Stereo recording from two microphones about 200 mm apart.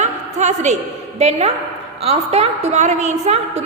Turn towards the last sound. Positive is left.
turn(degrees=-30)  # may be behind; listen again after turning